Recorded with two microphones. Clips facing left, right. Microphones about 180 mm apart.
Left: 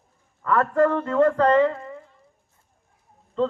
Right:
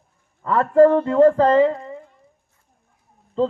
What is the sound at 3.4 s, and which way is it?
Speech, 30° right (ahead or behind).